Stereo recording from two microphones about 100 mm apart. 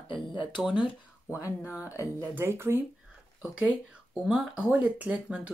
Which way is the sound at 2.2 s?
20° right (ahead or behind).